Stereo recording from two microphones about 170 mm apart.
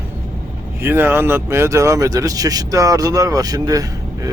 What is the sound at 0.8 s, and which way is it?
Speech, 15° right (ahead or behind).